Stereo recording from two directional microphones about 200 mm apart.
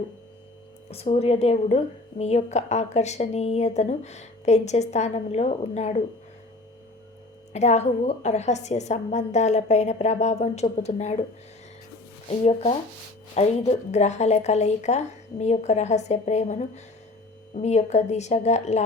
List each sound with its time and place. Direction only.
0.9 s a woman's voice: 30° left (ahead or behind)
7.5 s a woman's voice: 35° left (ahead or behind)
12.3 s a woman's voice: 30° left (ahead or behind)